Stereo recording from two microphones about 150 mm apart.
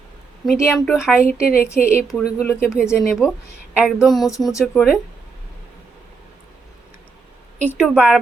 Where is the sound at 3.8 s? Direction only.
Centre (ahead or behind).